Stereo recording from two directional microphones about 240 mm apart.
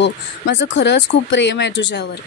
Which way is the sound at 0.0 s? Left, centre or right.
Left.